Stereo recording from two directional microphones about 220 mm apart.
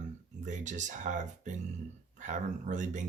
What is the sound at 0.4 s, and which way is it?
Speech, 35° right (ahead or behind).